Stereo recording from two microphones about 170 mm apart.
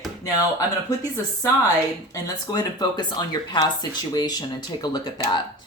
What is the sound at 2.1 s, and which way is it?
Speech, 25° left (ahead or behind).